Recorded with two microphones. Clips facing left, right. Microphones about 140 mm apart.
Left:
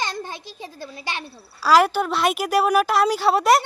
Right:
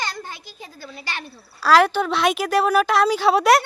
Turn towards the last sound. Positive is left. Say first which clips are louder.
# right 1 dB
turn(degrees=0)  # may be behind; listen again after turning